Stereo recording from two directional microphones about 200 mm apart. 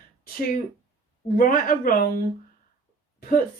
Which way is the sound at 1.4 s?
45° left (ahead or behind).